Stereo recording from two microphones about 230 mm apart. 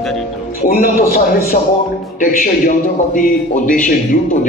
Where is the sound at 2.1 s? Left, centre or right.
Left.